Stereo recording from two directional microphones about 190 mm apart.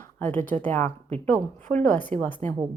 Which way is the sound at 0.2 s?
10° left (ahead or behind).